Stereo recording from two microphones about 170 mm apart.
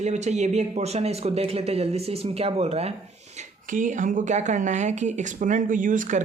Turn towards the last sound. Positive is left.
turn(degrees=-50)  # may be behind; listen again after turning